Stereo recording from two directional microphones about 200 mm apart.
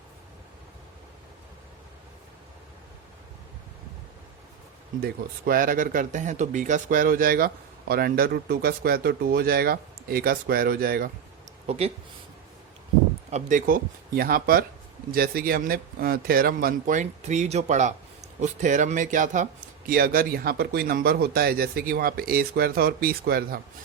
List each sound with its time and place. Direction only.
5.0 s speech: 45° right (ahead or behind)
11.6 s speech: 30° right (ahead or behind)
13.3 s speech: 40° right (ahead or behind)